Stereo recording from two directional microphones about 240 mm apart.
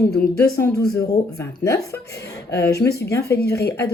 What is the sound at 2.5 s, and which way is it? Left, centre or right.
Speech, left.